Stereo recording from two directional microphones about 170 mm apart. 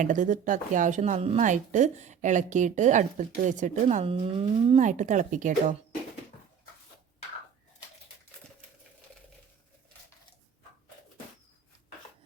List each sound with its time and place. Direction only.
0.0 s speech: 50° right (ahead or behind)